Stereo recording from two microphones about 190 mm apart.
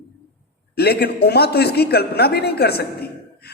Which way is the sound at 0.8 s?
55° left (ahead or behind).